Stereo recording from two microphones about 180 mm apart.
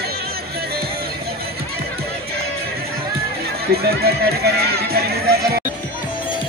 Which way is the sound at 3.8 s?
60° right (ahead or behind).